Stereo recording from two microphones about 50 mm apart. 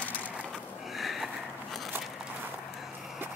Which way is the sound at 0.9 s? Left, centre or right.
Centre.